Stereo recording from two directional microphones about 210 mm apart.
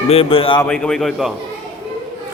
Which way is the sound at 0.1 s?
25° left (ahead or behind).